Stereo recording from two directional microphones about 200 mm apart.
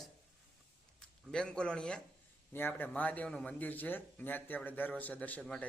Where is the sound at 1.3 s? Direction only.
5° left (ahead or behind).